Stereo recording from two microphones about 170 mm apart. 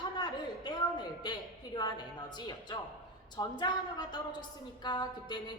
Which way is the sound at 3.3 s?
25° left (ahead or behind).